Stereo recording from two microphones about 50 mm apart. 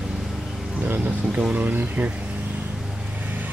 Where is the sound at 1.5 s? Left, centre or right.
Right.